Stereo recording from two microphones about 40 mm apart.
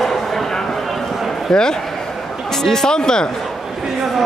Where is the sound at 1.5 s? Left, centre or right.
Centre.